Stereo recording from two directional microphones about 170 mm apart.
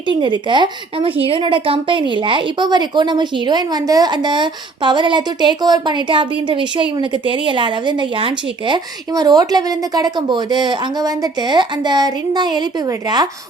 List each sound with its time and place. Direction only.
0.1 s a woman's voice: 25° right (ahead or behind)